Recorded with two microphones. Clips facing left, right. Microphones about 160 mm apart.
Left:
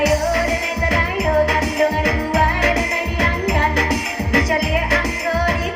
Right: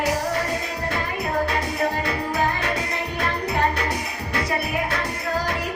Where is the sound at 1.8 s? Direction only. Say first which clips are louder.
Left 6 dB; 75° left (ahead or behind).